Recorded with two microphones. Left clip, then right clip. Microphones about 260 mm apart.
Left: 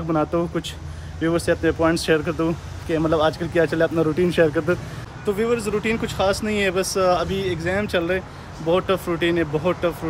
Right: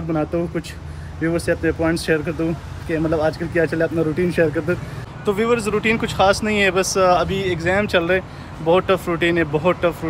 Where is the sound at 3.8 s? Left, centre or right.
Centre.